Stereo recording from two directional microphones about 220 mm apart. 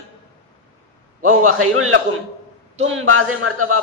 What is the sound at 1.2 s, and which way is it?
A man's voice, 75° right (ahead or behind).